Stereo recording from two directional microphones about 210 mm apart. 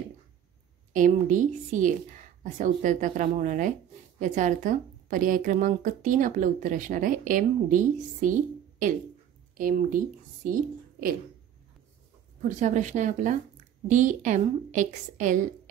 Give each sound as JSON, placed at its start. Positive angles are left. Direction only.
{"t": 0.9, "sound": "a woman's voice", "side_deg": -40}
{"t": 12.4, "sound": "a woman's voice", "side_deg": -35}